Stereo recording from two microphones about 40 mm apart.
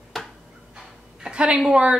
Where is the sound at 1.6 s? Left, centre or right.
Right.